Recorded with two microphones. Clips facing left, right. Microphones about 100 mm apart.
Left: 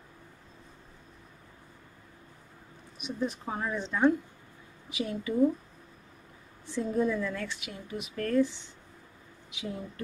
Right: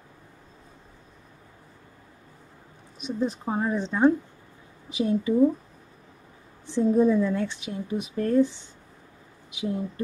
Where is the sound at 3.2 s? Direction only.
25° right (ahead or behind).